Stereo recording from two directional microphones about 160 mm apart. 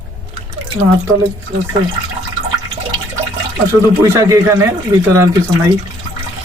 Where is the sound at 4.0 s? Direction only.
20° right (ahead or behind).